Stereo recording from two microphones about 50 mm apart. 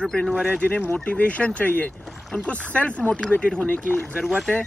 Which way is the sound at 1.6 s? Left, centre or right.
Left.